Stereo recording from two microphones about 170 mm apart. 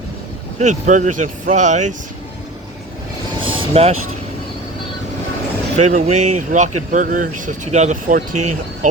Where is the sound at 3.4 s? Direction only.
35° right (ahead or behind).